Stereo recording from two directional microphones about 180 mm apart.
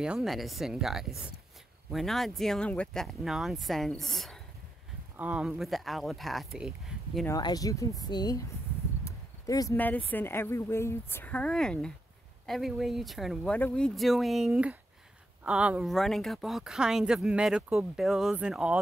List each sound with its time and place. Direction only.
0.0 s speech: 5° right (ahead or behind)
6.9 s a sound: 5° right (ahead or behind)
7.2 s speech: 20° left (ahead or behind); by 18.8 s 5° right (ahead or behind)